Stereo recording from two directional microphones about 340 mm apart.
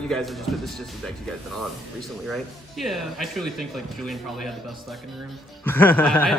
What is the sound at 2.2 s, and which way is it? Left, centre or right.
A man's voice, centre.